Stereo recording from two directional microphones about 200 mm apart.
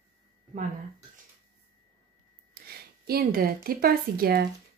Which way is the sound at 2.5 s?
50° right (ahead or behind).